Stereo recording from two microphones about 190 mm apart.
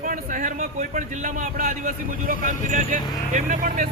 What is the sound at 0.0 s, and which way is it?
A man's voice, 45° right (ahead or behind).